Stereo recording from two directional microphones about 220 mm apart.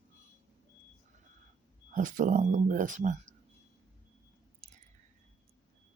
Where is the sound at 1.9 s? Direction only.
35° right (ahead or behind).